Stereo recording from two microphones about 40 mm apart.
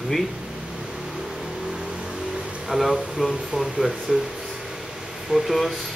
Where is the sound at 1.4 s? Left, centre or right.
Centre.